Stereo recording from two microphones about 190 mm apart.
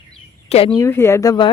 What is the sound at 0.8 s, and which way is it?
Speech, 15° left (ahead or behind).